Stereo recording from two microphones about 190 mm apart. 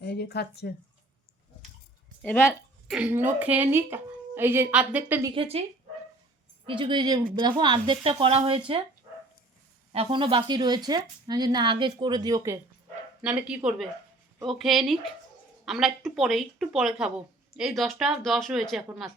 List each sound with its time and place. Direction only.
0.0 s speech: 60° left (ahead or behind)
2.2 s speech: 10° left (ahead or behind)
2.8 s a woman's voice: 5° right (ahead or behind)
5.3 s speech: 30° right (ahead or behind)
6.7 s speech: 25° right (ahead or behind)
9.9 s speech: 30° right (ahead or behind)
13.2 s speech: 5° right (ahead or behind)